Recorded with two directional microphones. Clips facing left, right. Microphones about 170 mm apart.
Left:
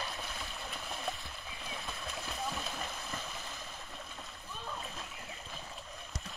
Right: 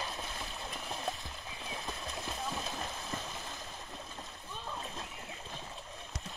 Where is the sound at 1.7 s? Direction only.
20° right (ahead or behind).